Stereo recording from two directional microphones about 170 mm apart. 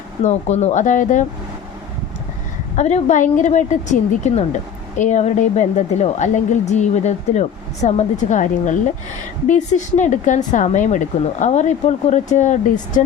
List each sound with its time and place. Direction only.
0.2 s speech: 40° left (ahead or behind)
2.7 s speech: 45° left (ahead or behind)